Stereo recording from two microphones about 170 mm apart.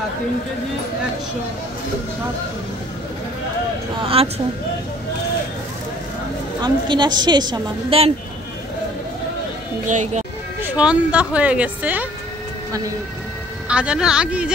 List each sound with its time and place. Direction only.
4.0 s speech: 35° right (ahead or behind)
6.6 s a woman's voice: 25° right (ahead or behind)
9.8 s speech: 45° right (ahead or behind)
10.6 s speech: 10° right (ahead or behind)
13.7 s speech: 5° right (ahead or behind)